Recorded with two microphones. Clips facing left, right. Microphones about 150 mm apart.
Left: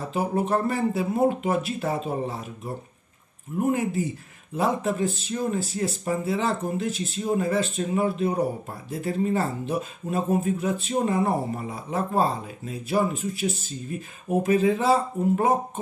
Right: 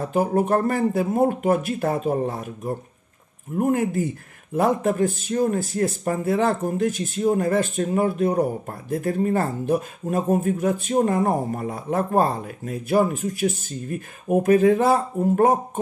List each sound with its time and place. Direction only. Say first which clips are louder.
0.0 s speech: right 5 dB; 50° right (ahead or behind)